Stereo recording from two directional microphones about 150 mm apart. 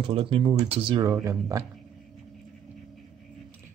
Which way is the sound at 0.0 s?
35° right (ahead or behind).